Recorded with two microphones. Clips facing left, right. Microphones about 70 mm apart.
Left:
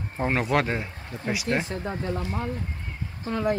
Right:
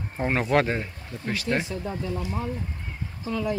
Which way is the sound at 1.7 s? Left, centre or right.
Left.